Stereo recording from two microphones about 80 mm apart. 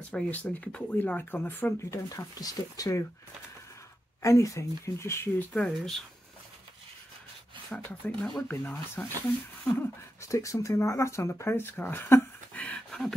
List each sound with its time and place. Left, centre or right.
0.1 s speech: centre
1.8 s speech: left
4.2 s speech: left
5.7 s speech: centre
7.7 s speech: centre
10.2 s speech: left
12.6 s a sound: centre